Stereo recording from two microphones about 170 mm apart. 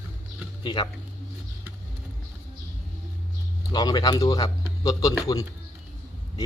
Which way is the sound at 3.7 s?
25° left (ahead or behind).